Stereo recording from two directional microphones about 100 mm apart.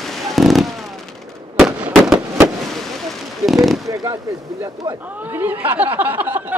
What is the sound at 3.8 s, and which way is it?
Speech, 35° right (ahead or behind).